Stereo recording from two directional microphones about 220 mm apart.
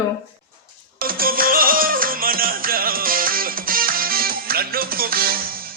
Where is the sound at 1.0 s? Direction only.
40° right (ahead or behind).